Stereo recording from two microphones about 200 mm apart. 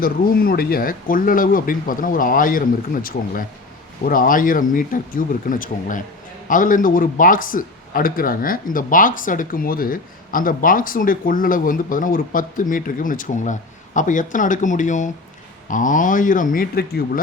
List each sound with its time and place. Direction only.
0.0 s a man's voice: 50° left (ahead or behind)